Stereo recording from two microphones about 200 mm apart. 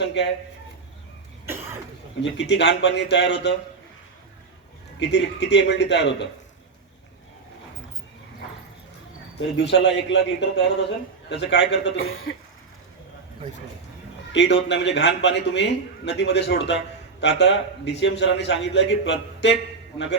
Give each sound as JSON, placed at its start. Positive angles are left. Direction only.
{"t": 0.0, "sound": "a man's voice", "side_deg": 65}
{"t": 2.2, "sound": "a man's voice", "side_deg": 60}
{"t": 4.9, "sound": "a man's voice", "side_deg": 60}
{"t": 9.6, "sound": "a man's voice", "side_deg": 60}
{"t": 14.3, "sound": "a man's voice", "side_deg": 60}